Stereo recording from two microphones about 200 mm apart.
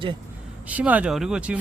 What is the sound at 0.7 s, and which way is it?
Speech, 5° right (ahead or behind).